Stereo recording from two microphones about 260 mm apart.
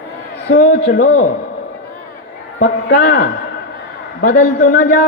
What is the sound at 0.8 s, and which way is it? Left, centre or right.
Speech, left.